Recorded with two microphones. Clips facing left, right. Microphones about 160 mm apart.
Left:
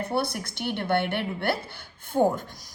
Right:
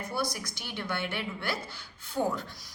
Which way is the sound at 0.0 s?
60° left (ahead or behind).